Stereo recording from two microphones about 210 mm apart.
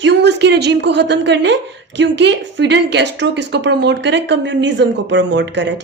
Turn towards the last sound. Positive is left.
turn(degrees=-55)  # may be behind; listen again after turning